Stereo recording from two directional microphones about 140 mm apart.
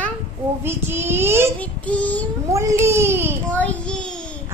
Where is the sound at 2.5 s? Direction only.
20° right (ahead or behind).